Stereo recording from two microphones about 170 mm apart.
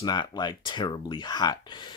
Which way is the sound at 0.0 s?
25° left (ahead or behind).